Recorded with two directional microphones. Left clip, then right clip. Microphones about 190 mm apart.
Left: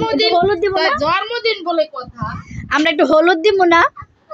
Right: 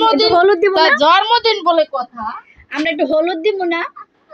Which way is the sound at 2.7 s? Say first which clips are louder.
Left 3 dB; 30° left (ahead or behind).